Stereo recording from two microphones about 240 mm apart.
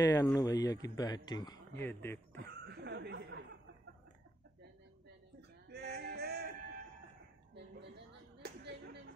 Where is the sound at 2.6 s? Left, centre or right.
Right.